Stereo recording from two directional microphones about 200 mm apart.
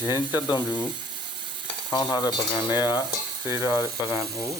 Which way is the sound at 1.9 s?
15° left (ahead or behind).